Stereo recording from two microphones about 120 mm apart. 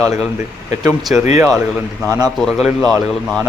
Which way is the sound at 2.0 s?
25° right (ahead or behind).